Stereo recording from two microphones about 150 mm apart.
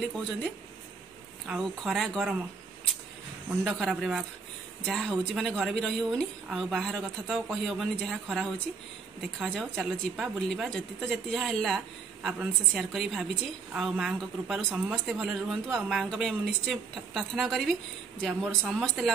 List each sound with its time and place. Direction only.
1.5 s a man's voice: centre (ahead or behind)
3.6 s a man's voice: 5° right (ahead or behind)